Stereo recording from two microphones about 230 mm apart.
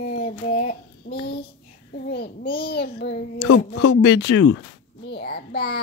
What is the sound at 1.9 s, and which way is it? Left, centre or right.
A child's voice, left.